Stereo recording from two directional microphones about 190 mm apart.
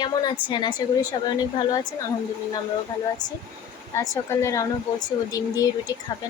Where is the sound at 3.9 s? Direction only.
15° left (ahead or behind).